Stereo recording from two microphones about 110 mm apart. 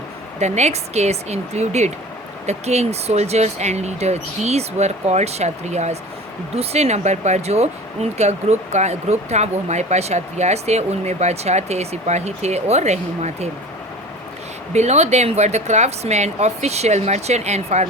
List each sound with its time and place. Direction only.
0.3 s speech: 90° right
14.7 s speech: 90° right